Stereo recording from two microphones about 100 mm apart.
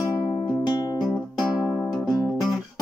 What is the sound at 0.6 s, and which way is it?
Music, 45° left (ahead or behind).